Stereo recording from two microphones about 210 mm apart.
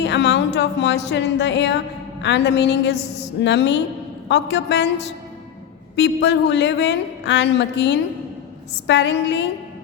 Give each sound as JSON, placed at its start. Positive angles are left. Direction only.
{"t": 0.0, "sound": "speech", "side_deg": 55}